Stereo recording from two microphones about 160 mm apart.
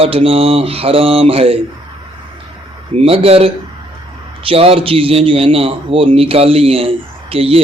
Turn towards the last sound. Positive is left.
turn(degrees=-35)  # may be behind; listen again after turning